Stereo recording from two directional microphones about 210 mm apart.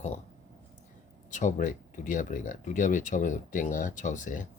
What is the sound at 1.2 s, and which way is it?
Speech, 35° left (ahead or behind).